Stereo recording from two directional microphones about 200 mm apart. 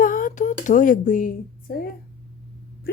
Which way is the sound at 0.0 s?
45° left (ahead or behind).